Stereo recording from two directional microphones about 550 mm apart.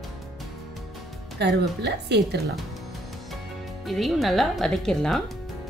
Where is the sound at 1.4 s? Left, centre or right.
Centre.